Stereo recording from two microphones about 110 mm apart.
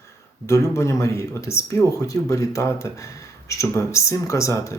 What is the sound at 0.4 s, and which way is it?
Speech, 25° left (ahead or behind).